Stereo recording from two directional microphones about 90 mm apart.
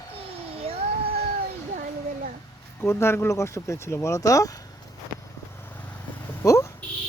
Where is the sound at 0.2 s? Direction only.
90° right.